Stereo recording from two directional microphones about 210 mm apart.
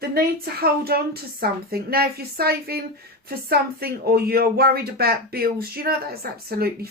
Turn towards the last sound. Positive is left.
turn(degrees=-45)  # may be behind; listen again after turning